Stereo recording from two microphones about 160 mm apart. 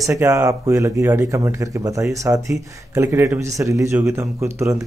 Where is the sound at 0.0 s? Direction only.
20° right (ahead or behind).